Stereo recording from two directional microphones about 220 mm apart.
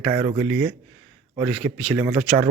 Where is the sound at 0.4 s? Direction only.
60° right (ahead or behind).